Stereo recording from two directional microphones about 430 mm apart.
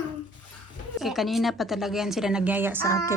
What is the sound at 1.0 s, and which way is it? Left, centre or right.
A child's voice, centre.